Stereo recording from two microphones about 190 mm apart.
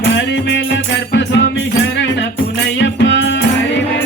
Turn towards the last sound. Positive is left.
turn(degrees=70)  # may be behind; listen again after turning